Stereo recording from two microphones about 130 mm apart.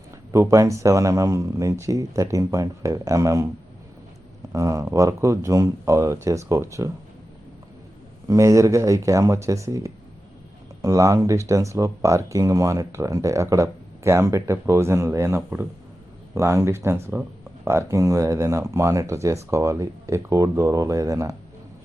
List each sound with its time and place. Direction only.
0.3 s speech: 25° right (ahead or behind)
4.5 s speech: 25° right (ahead or behind)
8.3 s speech: 25° right (ahead or behind)